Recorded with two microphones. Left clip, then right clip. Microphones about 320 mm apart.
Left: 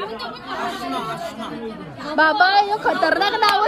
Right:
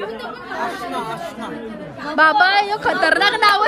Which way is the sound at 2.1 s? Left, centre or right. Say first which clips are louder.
Right 2 dB; centre.